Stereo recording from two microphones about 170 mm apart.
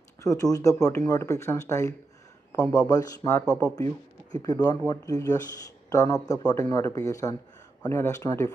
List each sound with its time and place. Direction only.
0.2 s speech: 20° left (ahead or behind)